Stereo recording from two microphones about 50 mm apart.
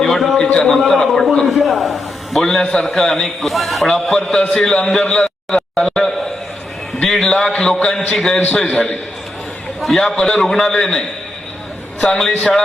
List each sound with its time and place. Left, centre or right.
0.0 s a sound: centre
0.3 s a man's voice: centre
5.0 s a sound: centre
7.0 s a man's voice: centre
7.9 s a man's voice: centre
9.8 s a man's voice: centre